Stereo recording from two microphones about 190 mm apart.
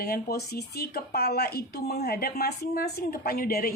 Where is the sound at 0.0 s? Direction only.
55° left (ahead or behind).